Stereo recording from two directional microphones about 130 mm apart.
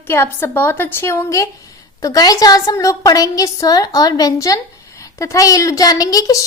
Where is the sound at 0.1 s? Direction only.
20° left (ahead or behind).